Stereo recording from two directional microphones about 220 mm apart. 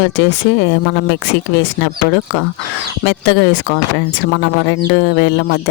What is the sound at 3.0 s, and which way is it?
Speech, 60° left (ahead or behind).